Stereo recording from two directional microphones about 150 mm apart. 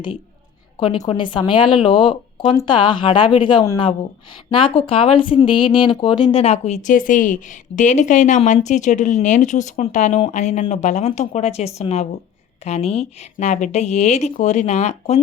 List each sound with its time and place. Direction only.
1.0 s speech: 30° left (ahead or behind)
6.4 s speech: 45° left (ahead or behind)